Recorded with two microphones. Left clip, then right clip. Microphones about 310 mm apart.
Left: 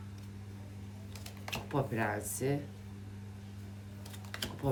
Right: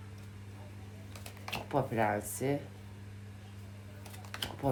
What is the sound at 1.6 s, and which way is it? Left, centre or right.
Speech, centre.